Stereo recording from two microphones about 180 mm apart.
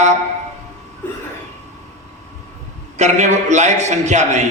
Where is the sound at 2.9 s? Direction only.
40° right (ahead or behind).